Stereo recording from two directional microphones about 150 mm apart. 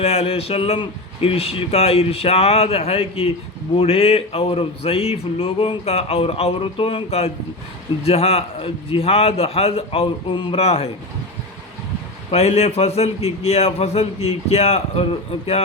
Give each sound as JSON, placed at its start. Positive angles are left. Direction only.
{"t": 0.0, "sound": "speech", "side_deg": 45}
{"t": 12.3, "sound": "a man's voice", "side_deg": 45}